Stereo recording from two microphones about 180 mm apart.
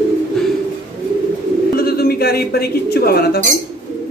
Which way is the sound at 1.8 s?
60° left (ahead or behind).